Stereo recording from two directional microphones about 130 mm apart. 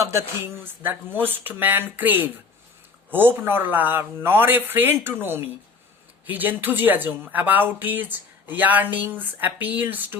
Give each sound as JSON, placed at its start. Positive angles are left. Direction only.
{"t": 0.0, "sound": "speech", "side_deg": -20}